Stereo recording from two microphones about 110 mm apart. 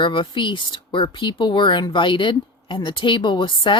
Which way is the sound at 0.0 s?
50° left (ahead or behind).